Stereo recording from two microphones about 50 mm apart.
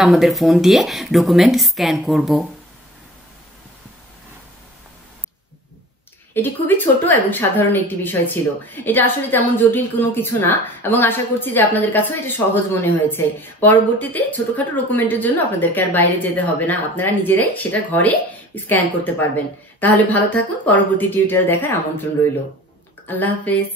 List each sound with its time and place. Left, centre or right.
0.0 s speech: centre
6.3 s a woman's voice: left
23.0 s a woman's voice: left